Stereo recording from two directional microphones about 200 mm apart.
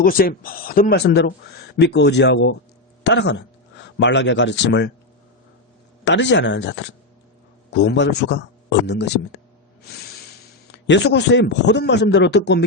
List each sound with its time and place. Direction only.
0.0 s speech: 45° left (ahead or behind); by 4.9 s 60° left (ahead or behind)
6.1 s speech: 65° left (ahead or behind)
10.7 s speech: 60° left (ahead or behind)